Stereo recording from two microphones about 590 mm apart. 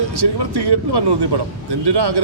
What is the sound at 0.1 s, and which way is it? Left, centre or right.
A man's voice, right.